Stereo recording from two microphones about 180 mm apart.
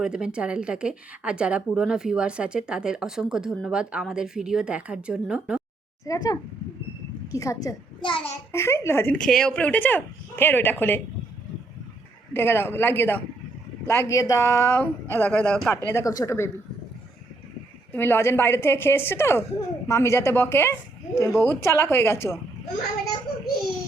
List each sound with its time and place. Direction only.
0.0 s speech: 5° right (ahead or behind)
6.1 s a child's voice: 20° left (ahead or behind)
8.5 s a woman's voice: 15° left (ahead or behind)
12.3 s a woman's voice: 15° left (ahead or behind)
15.9 s a woman's voice: 15° left (ahead or behind)
17.9 s a woman's voice: 10° left (ahead or behind)